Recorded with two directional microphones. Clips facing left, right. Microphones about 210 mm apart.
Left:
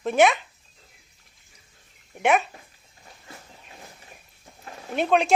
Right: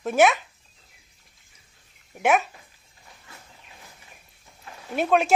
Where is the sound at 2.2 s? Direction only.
Centre (ahead or behind).